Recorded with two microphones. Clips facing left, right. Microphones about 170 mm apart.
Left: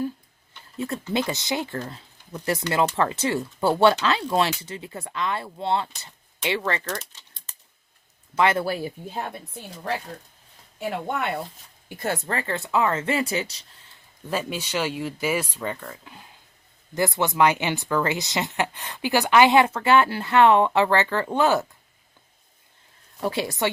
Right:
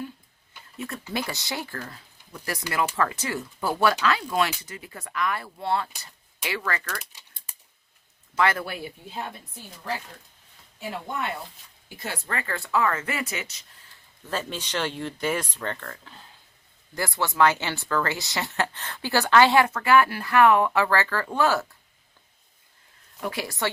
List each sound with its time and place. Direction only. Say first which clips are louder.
1.3 s speech: left 6 dB; 20° left (ahead or behind)
6.0 s a sound: left 5 dB; 25° left (ahead or behind)
6.7 s speech: left 3 dB; 25° left (ahead or behind)
7.0 s typewriter: left 1 dB; 10° right (ahead or behind)
8.4 s speech: left 3 dB; 20° left (ahead or behind)
8.6 s speech: left 7 dB; 40° left (ahead or behind)
11.9 s speech: left 8 dB; 50° left (ahead or behind)
12.3 s speech: right 2 dB; 25° left (ahead or behind)
14.3 s speech: left 3 dB; 10° left (ahead or behind)
23.2 s speech: left 4 dB; 25° left (ahead or behind)